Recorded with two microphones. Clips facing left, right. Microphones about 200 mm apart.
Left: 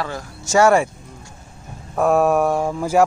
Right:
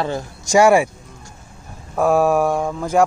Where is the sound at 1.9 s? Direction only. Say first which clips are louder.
Even; centre (ahead or behind).